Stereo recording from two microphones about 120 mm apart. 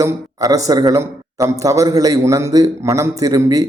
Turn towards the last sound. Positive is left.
turn(degrees=-30)  # may be behind; listen again after turning